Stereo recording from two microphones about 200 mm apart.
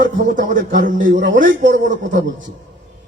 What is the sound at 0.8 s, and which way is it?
Speech, 40° right (ahead or behind).